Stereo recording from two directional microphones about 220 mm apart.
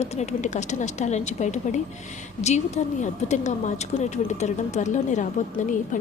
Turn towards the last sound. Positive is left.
turn(degrees=35)  # may be behind; listen again after turning